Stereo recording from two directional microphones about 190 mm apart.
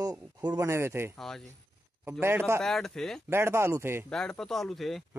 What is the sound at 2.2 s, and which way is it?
Speech, 15° right (ahead or behind).